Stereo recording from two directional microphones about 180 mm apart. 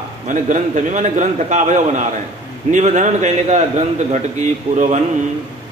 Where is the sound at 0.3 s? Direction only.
45° right (ahead or behind).